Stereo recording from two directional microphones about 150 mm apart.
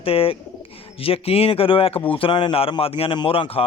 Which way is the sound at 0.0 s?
40° left (ahead or behind).